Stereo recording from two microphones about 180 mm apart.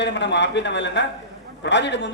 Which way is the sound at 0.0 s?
75° left (ahead or behind).